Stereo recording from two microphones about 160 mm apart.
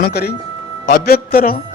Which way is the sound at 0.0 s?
80° left.